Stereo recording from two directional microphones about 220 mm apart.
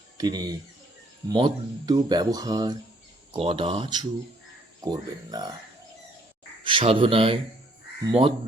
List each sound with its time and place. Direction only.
0.2 s speech: 20° right (ahead or behind)
6.7 s speech: 25° right (ahead or behind)